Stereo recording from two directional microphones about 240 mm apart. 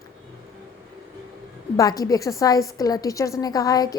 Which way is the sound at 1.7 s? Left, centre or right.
Centre.